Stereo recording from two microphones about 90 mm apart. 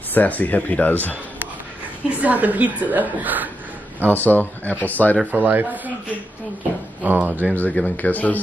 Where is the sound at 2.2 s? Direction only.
20° right (ahead or behind).